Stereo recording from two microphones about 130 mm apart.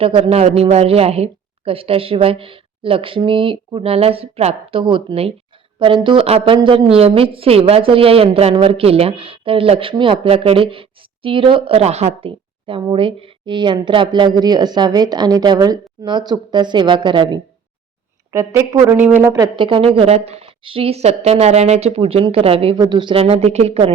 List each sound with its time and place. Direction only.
0.0 s a woman's voice: 45° right (ahead or behind)
18.5 s speech: 20° right (ahead or behind)
19.5 s speech: 40° right (ahead or behind)